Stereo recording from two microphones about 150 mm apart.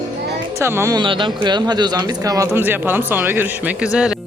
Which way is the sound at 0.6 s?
15° right (ahead or behind).